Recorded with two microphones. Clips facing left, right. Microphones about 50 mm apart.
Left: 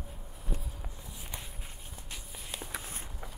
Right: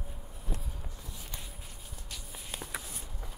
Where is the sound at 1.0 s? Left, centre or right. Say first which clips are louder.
Left 1 dB; centre.